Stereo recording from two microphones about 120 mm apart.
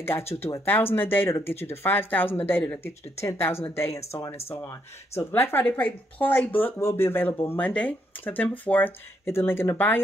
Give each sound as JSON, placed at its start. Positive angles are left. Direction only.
{"t": 0.7, "sound": "speech", "side_deg": 15}